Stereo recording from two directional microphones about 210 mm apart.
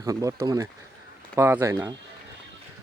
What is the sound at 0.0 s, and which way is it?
Speech, 15° right (ahead or behind).